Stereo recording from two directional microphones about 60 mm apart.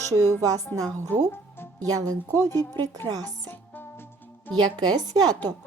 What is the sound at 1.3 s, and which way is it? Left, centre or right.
Music, left.